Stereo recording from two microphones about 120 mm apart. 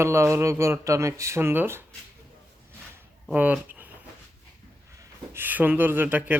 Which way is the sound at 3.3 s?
15° right (ahead or behind).